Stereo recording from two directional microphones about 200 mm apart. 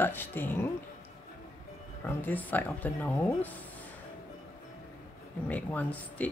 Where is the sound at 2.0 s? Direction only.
10° left (ahead or behind).